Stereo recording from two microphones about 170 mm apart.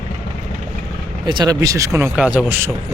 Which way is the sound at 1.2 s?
25° right (ahead or behind).